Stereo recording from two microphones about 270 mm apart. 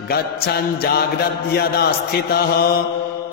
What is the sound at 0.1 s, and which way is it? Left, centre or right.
Mantra, left.